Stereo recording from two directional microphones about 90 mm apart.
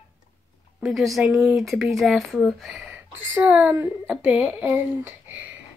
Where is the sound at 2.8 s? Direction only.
20° right (ahead or behind).